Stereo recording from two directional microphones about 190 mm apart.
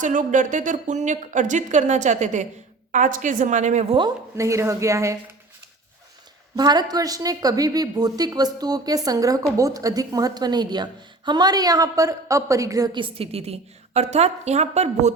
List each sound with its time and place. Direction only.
0.0 s speech: 40° right (ahead or behind)
4.4 s a woman's voice: 15° right (ahead or behind)
6.6 s speech: 20° right (ahead or behind); by 15.1 s 35° right (ahead or behind)